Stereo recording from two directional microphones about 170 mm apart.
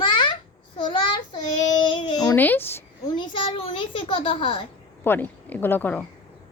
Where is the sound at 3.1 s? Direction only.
30° left (ahead or behind).